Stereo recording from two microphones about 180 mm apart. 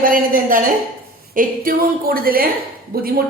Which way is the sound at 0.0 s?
50° right (ahead or behind).